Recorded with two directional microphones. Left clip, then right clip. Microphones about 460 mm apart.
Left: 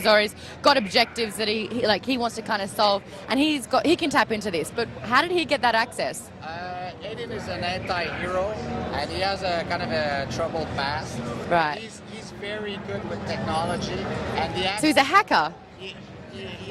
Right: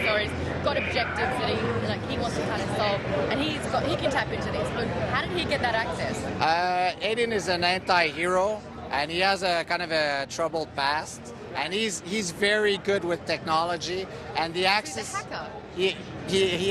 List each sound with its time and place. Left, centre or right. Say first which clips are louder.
0.0 s speech: left 6 dB; left
6.4 s speech: right 10 dB; right
14.9 s speech: left 15 dB; left
16.3 s speech: right 14 dB; right